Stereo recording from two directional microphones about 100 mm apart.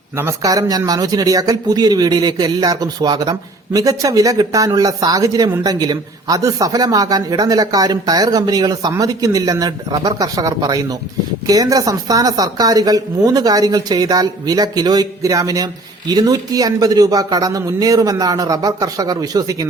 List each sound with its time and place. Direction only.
0.2 s speech: 35° right (ahead or behind)